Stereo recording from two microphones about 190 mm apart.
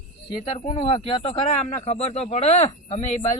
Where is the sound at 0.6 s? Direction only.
25° left (ahead or behind).